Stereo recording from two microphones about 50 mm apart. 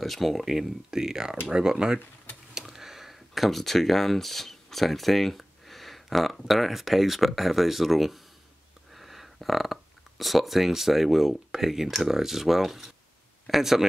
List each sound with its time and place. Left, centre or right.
0.0 s speech: centre